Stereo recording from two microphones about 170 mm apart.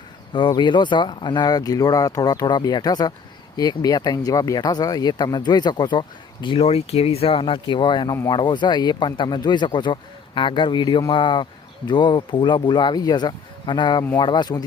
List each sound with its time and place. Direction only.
0.3 s speech: 25° left (ahead or behind)
8.1 s speech: 15° left (ahead or behind)
8.4 s speech: 25° left (ahead or behind)